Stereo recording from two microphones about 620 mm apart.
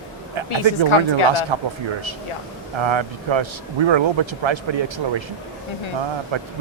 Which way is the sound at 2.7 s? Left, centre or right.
Right.